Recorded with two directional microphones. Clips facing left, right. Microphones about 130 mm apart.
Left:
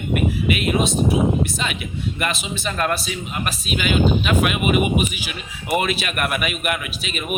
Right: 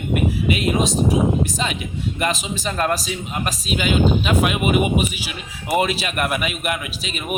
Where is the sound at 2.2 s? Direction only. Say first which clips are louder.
Right 3 dB; 30° right (ahead or behind).